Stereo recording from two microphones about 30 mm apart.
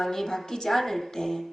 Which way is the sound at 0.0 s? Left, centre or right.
Centre.